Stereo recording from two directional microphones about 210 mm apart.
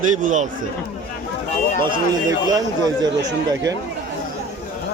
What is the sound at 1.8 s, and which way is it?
Speech, 20° right (ahead or behind).